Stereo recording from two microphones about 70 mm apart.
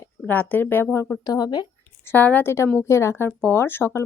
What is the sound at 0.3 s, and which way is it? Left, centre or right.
Speech, left.